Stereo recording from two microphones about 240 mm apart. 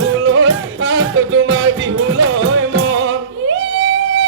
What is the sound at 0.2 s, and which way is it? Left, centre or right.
Music, right.